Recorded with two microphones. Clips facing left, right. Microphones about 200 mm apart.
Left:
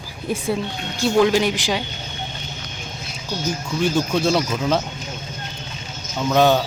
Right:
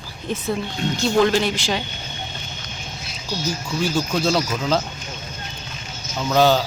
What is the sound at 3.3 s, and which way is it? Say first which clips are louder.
Speech: left 1 dB; 55° left (ahead or behind).